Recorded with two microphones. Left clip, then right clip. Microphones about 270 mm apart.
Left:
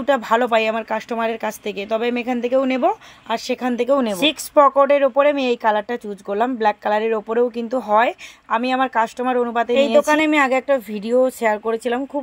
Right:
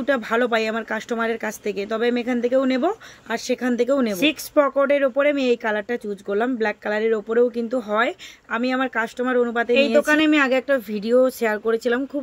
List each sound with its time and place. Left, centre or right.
0.0 s speech: centre